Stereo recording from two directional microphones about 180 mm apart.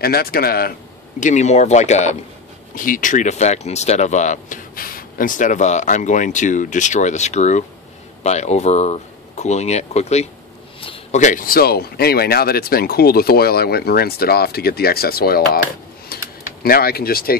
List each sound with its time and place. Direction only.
0.0 s speech: 60° left (ahead or behind)
1.2 s speech: 40° left (ahead or behind)
10.8 s a sound: 30° left (ahead or behind)
11.1 s speech: 45° left (ahead or behind)
16.1 s a sound: 60° left (ahead or behind)
16.6 s speech: 55° left (ahead or behind)